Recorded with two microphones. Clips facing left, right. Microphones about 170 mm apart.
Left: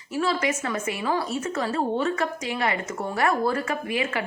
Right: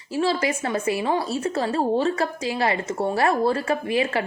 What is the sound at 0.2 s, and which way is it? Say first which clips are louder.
Speech: right 2 dB; 30° right (ahead or behind).